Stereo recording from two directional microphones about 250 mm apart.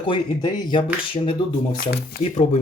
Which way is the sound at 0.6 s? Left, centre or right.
Centre.